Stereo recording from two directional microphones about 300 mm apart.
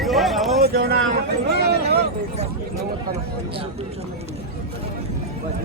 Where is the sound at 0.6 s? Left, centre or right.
Right.